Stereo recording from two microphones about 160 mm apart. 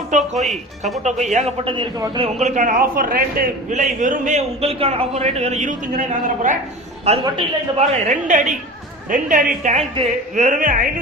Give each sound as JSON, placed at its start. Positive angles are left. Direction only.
{"t": 0.3, "sound": "speech", "side_deg": 0}
{"t": 1.0, "sound": "a man's voice", "side_deg": -45}
{"t": 2.4, "sound": "a man's voice", "side_deg": -50}
{"t": 7.0, "sound": "a man's voice", "side_deg": -40}